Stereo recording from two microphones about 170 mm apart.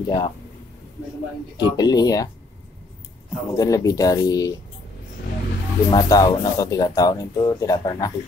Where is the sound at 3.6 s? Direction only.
20° left (ahead or behind).